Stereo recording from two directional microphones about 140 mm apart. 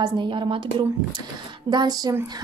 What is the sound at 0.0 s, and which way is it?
A woman's voice, 35° right (ahead or behind).